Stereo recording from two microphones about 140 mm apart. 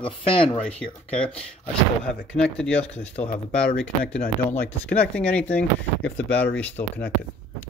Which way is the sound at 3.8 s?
10° left (ahead or behind).